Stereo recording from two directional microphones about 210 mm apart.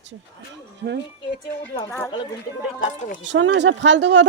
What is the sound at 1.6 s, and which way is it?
Speech, 10° left (ahead or behind).